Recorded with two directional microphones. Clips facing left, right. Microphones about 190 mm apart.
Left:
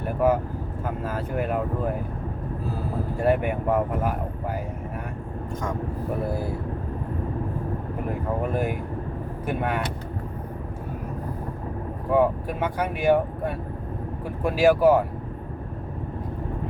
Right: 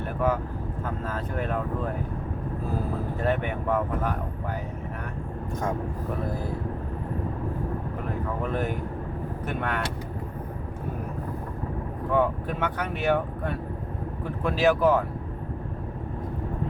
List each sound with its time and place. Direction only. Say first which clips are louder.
0.0 s vehicle: left 4 dB; 10° left (ahead or behind)
0.9 s speech: left 4 dB; 10° left (ahead or behind)
3.2 s speech: left 6 dB; 10° left (ahead or behind)
8.5 s speech: left 2 dB; 10° left (ahead or behind)
12.1 s speech: left 3 dB; 10° left (ahead or behind)